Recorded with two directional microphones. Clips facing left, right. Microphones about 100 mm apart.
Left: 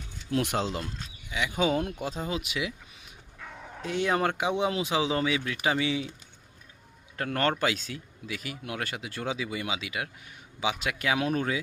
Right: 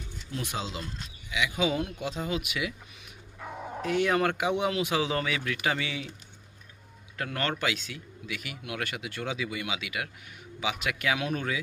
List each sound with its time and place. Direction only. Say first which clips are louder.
0.3 s speech: left 7 dB; 65° left (ahead or behind)
1.3 s speech: left 1 dB; 40° left (ahead or behind)
3.4 s dog: right 6 dB; 25° right (ahead or behind)
3.8 s speech: right 1 dB; 25° left (ahead or behind)
7.2 s speech: left 4 dB; 40° left (ahead or behind)